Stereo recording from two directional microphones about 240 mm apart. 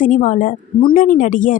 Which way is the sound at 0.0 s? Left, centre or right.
Left.